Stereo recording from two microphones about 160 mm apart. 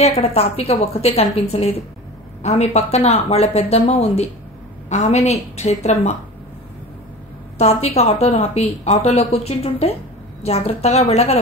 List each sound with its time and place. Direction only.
0.0 s a woman's voice: 40° left (ahead or behind)
7.5 s a woman's voice: 40° left (ahead or behind)